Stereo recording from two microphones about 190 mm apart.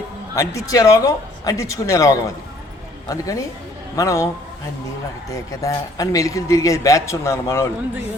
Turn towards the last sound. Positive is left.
turn(degrees=15)  # may be behind; listen again after turning